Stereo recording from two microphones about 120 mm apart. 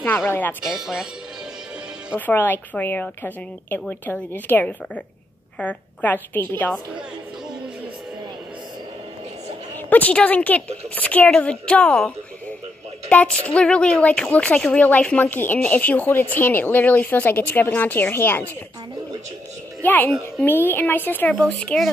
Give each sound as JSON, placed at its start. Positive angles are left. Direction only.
{"t": 0.3, "sound": "speech", "side_deg": 15}
{"t": 0.7, "sound": "speech", "side_deg": -5}
{"t": 2.1, "sound": "speech", "side_deg": 15}
{"t": 9.8, "sound": "speech", "side_deg": 10}
{"t": 13.1, "sound": "speech", "side_deg": 10}
{"t": 19.8, "sound": "a child's voice", "side_deg": 15}